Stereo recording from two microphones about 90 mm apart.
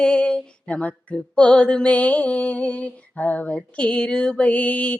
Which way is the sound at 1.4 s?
10° left (ahead or behind).